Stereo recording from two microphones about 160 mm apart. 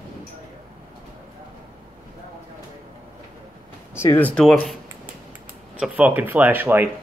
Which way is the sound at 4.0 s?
10° left (ahead or behind).